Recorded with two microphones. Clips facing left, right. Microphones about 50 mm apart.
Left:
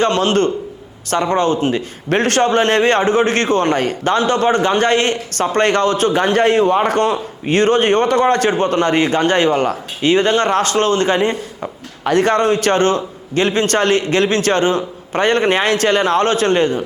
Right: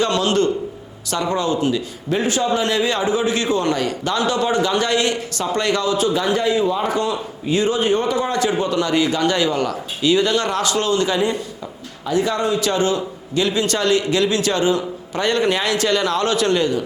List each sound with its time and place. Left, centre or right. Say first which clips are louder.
0.0 s a man's voice: left 3 dB; left
2.1 s a man's voice: left 5 dB; left
12.0 s a man's voice: left 6 dB; left